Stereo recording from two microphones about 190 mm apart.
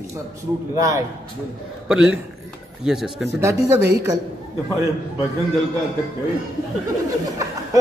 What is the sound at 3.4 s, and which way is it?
Speech, 15° right (ahead or behind).